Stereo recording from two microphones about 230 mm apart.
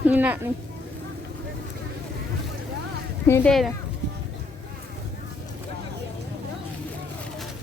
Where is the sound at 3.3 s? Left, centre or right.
Centre.